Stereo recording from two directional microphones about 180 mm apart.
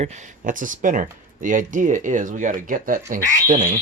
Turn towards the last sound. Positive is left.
turn(degrees=-45)  # may be behind; listen again after turning